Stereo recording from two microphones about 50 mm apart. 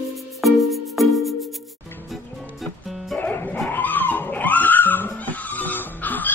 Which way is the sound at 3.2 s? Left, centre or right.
Left.